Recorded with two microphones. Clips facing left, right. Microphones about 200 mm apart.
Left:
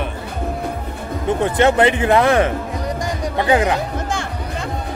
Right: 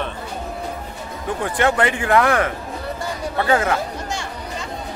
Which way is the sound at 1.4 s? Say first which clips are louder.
Left 4 dB; 20° left (ahead or behind).